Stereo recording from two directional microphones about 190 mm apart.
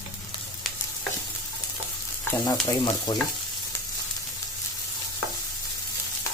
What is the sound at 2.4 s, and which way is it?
Speech, 20° left (ahead or behind).